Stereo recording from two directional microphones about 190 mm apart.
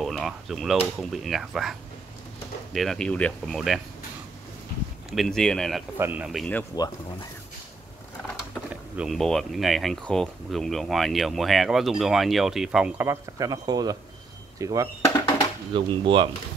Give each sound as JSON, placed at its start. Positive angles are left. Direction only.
{"t": 0.0, "sound": "speech", "side_deg": 0}
{"t": 5.1, "sound": "speech", "side_deg": 0}
{"t": 5.9, "sound": "speech", "side_deg": -10}
{"t": 6.7, "sound": "speech", "side_deg": 20}
{"t": 8.9, "sound": "speech", "side_deg": 0}
{"t": 15.0, "sound": "music", "side_deg": 20}
{"t": 15.7, "sound": "speech", "side_deg": -25}